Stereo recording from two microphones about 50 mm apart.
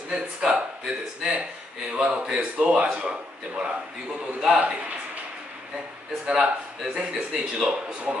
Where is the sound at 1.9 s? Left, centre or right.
Right.